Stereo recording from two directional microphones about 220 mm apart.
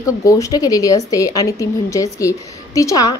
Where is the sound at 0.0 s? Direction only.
15° left (ahead or behind).